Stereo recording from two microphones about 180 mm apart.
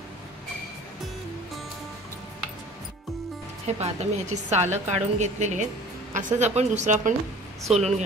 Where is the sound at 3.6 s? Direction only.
35° right (ahead or behind).